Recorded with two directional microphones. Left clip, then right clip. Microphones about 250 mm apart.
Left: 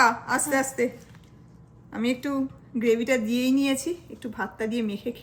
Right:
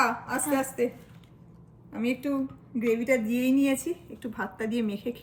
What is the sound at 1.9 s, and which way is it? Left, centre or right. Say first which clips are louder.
A woman's voice: left 2 dB; centre.